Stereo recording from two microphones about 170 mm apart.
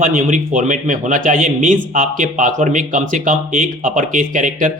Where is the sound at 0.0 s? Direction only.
50° right (ahead or behind).